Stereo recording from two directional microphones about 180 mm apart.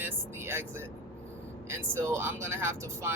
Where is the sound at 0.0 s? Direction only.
15° right (ahead or behind).